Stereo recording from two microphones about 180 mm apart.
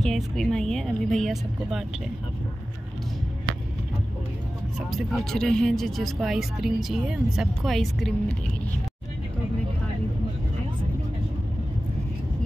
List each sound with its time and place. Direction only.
0.0 s speech: centre (ahead or behind)
4.7 s speech: centre (ahead or behind)